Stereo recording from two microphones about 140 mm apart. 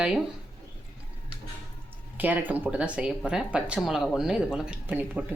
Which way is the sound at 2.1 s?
15° right (ahead or behind).